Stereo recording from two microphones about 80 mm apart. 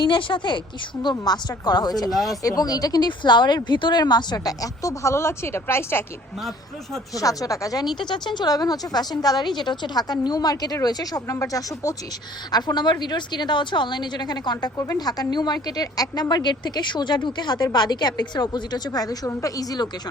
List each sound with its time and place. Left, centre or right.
0.0 s a woman's voice: left
1.1 s speech: left
2.0 s speech: centre
2.4 s speech: left
4.4 s speech: left
7.1 s speech: left
8.0 s speech: left
9.6 s speech: left
12.5 s speech: left
16.3 s speech: left